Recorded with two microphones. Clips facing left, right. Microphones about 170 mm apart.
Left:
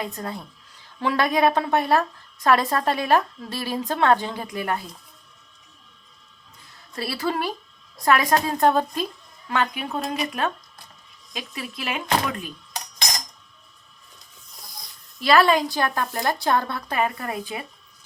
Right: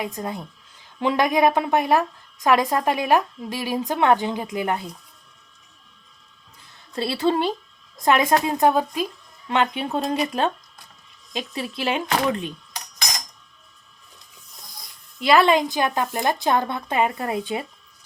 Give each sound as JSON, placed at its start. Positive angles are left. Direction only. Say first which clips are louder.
{"t": 0.0, "sound": "a woman's voice", "louder": "right 2 dB", "side_deg": -15}
{"t": 6.9, "sound": "speech", "louder": "right 5 dB", "side_deg": -25}
{"t": 9.5, "sound": "speech", "louder": "right 3 dB", "side_deg": -25}
{"t": 15.2, "sound": "speech", "louder": "right 1 dB", "side_deg": -20}